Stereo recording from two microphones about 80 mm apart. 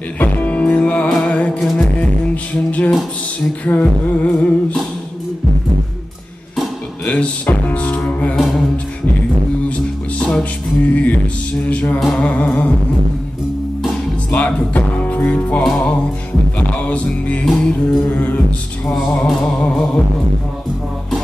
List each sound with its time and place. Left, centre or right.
0.2 s music: centre
3.6 s a sound: centre
7.1 s music: centre
8.4 s music: centre
9.7 s music: centre
11.6 s a sound: centre
12.1 s music: centre
14.3 s music: centre
18.1 s music: centre